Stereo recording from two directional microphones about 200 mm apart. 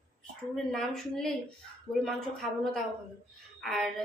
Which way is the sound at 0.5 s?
Centre (ahead or behind).